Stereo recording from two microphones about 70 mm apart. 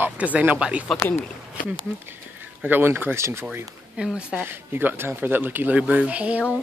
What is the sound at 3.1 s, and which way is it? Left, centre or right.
Speech, right.